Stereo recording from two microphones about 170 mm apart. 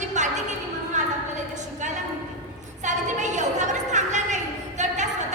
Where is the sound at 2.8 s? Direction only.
45° right (ahead or behind).